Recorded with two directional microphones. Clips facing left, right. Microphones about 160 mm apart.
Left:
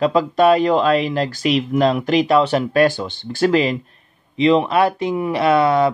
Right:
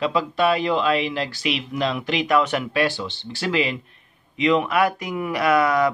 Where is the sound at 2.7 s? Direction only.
45° left (ahead or behind).